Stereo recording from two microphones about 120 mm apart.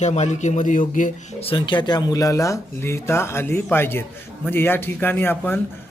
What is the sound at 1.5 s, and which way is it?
Speech, 40° left (ahead or behind).